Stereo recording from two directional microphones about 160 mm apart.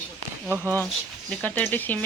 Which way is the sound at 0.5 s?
15° right (ahead or behind).